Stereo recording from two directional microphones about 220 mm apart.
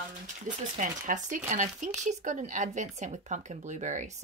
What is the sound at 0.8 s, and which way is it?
Speech, 35° right (ahead or behind).